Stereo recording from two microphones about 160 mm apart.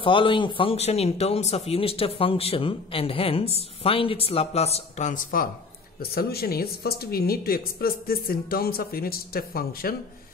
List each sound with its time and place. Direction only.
0.0 s speech: 30° left (ahead or behind); by 5.5 s 60° left (ahead or behind)
5.9 s a woman's voice: 70° left (ahead or behind)